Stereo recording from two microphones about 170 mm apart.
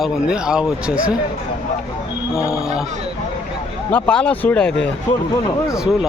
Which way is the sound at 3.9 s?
5° left (ahead or behind).